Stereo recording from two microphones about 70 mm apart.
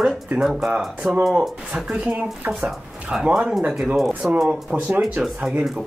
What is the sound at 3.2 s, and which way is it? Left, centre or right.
Speech, centre.